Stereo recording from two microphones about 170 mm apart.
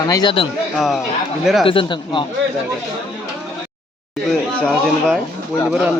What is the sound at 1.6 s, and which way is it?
Speech, 30° left (ahead or behind).